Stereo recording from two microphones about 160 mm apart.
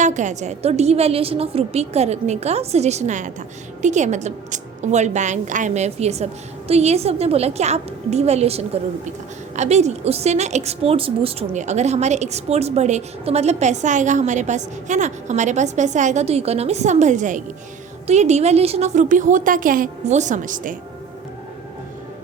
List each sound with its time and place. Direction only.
0.0 s a woman's voice: 50° right (ahead or behind)